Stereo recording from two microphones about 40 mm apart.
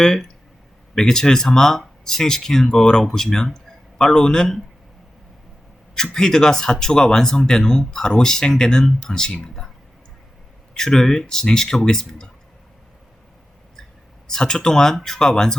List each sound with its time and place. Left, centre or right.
0.0 s speech: centre
6.0 s speech: centre
10.8 s speech: centre
14.3 s speech: centre